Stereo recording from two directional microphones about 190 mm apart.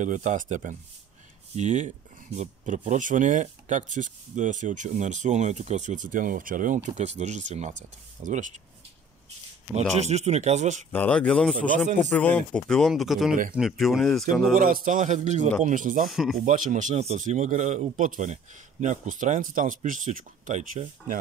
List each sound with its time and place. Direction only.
0.0 s speech: 40° right (ahead or behind)
10.0 s speech: 35° right (ahead or behind)
10.9 s speech: 10° left (ahead or behind)
14.6 s speech: 45° right (ahead or behind)
16.1 s speech: centre (ahead or behind)
16.3 s speech: 45° right (ahead or behind)